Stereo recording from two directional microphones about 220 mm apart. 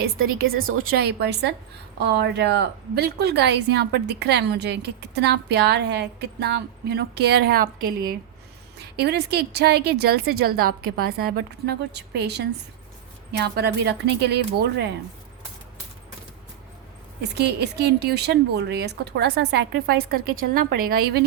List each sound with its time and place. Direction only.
0.0 s a woman's voice: 45° right (ahead or behind)
8.8 s a woman's voice: 50° right (ahead or behind)
17.3 s a woman's voice: 50° right (ahead or behind)